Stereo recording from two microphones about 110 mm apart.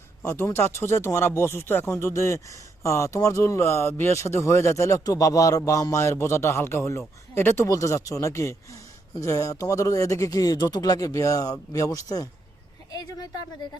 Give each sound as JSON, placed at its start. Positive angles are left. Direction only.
{"t": 0.4, "sound": "speech", "side_deg": 25}